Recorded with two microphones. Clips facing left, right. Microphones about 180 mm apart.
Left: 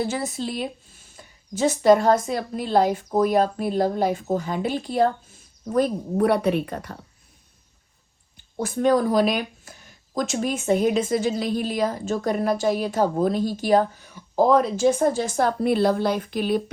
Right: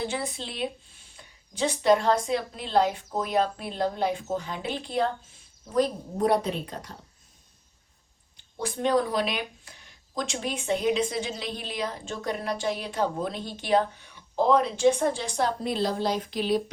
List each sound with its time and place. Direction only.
0.0 s speech: 45° left (ahead or behind)
5.7 s a woman's voice: 60° left (ahead or behind)
8.5 s speech: 45° left (ahead or behind)